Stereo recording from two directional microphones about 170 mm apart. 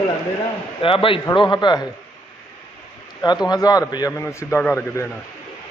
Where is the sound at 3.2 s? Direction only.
25° left (ahead or behind).